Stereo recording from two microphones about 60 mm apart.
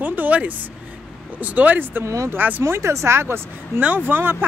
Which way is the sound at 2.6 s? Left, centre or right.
Right.